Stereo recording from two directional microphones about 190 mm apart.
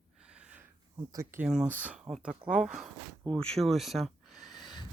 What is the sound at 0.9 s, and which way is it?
Speech, 15° right (ahead or behind).